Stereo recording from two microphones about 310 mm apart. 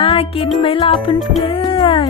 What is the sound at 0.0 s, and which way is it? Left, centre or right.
Speech, centre.